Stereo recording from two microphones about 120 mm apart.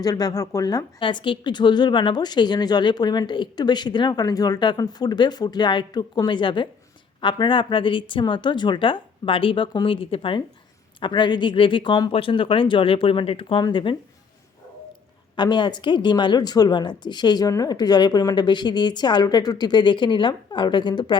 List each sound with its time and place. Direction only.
0.0 s speech: 30° left (ahead or behind)
0.9 s speech: 45° left (ahead or behind)
15.4 s speech: 40° left (ahead or behind)